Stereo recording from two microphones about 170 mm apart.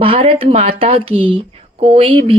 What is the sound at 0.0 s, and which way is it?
Speech, 35° right (ahead or behind).